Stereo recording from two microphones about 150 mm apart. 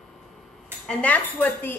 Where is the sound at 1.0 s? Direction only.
10° left (ahead or behind).